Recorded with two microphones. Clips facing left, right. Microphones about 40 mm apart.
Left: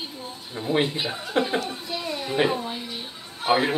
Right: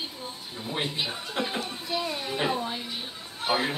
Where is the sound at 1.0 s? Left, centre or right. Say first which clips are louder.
Left 2 dB; centre.